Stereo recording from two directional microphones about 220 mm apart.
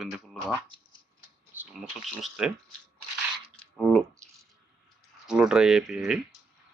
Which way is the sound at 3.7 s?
Centre (ahead or behind).